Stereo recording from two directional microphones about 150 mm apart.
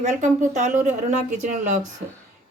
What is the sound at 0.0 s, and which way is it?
Speech, 55° right (ahead or behind).